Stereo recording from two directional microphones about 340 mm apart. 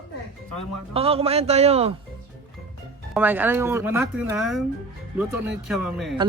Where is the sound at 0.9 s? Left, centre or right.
Centre.